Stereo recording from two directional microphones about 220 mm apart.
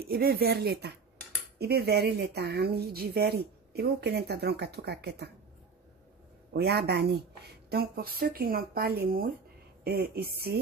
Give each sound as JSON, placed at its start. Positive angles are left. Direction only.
{"t": 0.0, "sound": "speech", "side_deg": -45}
{"t": 6.5, "sound": "speech", "side_deg": -45}